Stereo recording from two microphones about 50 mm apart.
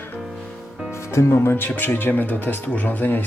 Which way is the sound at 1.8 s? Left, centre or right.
Left.